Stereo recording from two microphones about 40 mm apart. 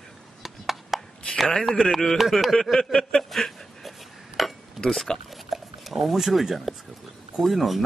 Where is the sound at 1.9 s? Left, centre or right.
Centre.